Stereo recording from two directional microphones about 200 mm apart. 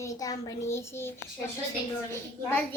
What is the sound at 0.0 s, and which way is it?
A child's voice, 15° left (ahead or behind).